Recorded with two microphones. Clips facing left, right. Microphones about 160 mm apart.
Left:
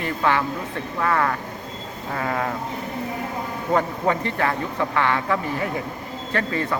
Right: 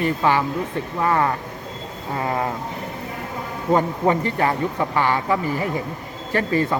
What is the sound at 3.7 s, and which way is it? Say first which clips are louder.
Speech: right 3 dB; 20° right (ahead or behind).